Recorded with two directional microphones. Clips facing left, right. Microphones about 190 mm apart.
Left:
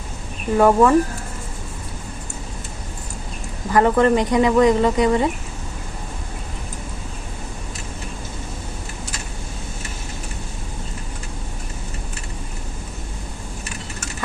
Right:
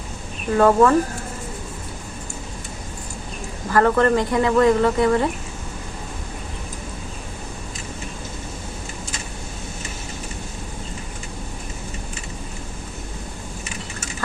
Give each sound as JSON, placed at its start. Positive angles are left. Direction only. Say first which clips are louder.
{"t": 0.5, "sound": "speech", "louder": "left 1 dB", "side_deg": 10}
{"t": 3.7, "sound": "speech", "louder": "left 1 dB", "side_deg": 15}